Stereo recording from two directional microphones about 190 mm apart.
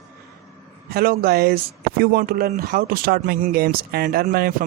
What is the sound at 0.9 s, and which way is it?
Speech, 50° right (ahead or behind).